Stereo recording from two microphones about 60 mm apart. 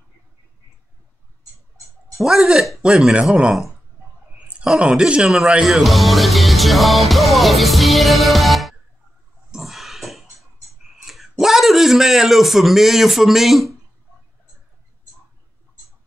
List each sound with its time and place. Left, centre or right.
2.1 s speech: centre
4.7 s speech: centre
5.5 s music: centre
11.1 s a man's voice: centre